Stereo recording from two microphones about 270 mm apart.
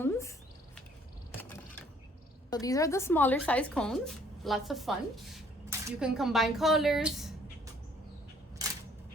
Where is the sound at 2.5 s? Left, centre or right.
Centre.